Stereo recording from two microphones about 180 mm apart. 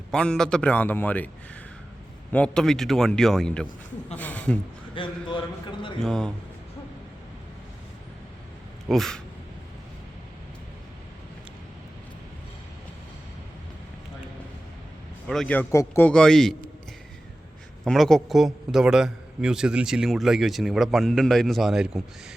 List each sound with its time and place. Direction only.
0.1 s a man's voice: 5° left (ahead or behind)
2.3 s a man's voice: 5° left (ahead or behind)
5.0 s a man's voice: 30° left (ahead or behind)
6.0 s a man's voice: 5° left (ahead or behind)
8.9 s a man's voice: centre (ahead or behind)
15.3 s a man's voice: 5° left (ahead or behind)
17.8 s a man's voice: centre (ahead or behind)